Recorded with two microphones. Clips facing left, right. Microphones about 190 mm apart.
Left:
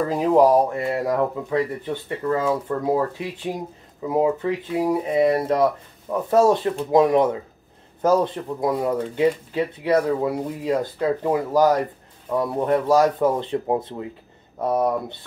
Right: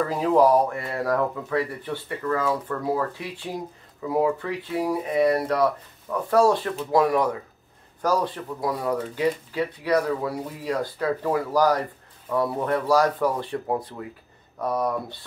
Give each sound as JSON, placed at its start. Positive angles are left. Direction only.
{"t": 0.1, "sound": "speech", "side_deg": 20}